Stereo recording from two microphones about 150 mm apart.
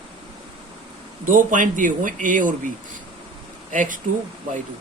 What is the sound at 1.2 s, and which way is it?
A man's voice, 60° right (ahead or behind).